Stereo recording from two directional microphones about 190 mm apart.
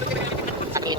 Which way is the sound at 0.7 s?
20° right (ahead or behind).